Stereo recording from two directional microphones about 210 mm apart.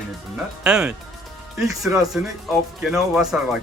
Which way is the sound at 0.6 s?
5° right (ahead or behind).